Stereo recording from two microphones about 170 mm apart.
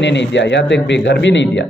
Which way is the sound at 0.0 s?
90° left.